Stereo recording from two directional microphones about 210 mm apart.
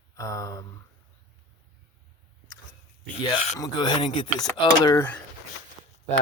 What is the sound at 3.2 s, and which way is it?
Speech, 20° left (ahead or behind).